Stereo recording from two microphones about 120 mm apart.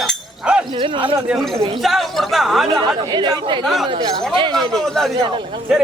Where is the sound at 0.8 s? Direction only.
45° right (ahead or behind).